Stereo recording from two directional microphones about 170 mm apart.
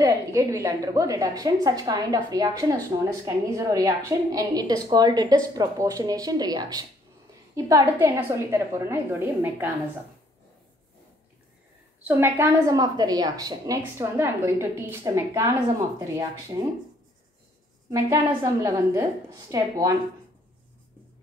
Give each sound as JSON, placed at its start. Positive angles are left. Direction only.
{"t": 0.0, "sound": "a woman's voice", "side_deg": -20}
{"t": 12.0, "sound": "a woman's voice", "side_deg": -15}
{"t": 17.9, "sound": "a woman's voice", "side_deg": -20}